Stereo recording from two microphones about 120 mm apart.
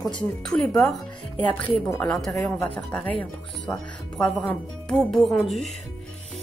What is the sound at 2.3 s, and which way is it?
Speech, 15° left (ahead or behind).